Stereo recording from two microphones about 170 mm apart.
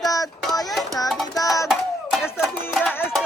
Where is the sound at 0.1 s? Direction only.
20° left (ahead or behind).